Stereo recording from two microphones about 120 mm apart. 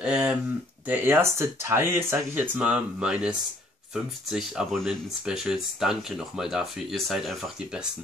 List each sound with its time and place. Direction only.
0.0 s speech: 10° right (ahead or behind)